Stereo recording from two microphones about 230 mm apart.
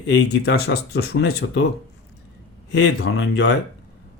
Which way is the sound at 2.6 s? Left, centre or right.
Left.